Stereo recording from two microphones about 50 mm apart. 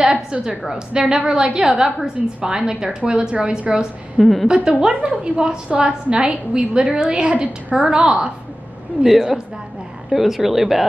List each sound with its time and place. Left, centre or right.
0.0 s a woman's voice: centre
4.2 s speech: centre
4.6 s a woman's voice: right
9.0 s a woman's voice: centre